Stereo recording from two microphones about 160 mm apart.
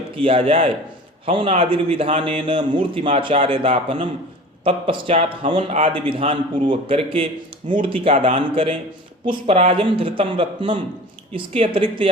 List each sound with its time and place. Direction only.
0.2 s a man's voice: 35° right (ahead or behind)